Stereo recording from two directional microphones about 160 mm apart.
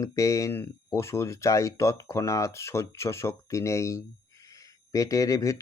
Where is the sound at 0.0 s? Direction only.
20° left (ahead or behind).